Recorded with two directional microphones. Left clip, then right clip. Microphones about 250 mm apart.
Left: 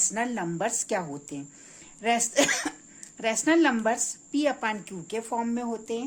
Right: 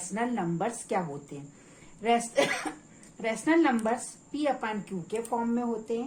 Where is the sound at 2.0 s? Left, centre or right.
Left.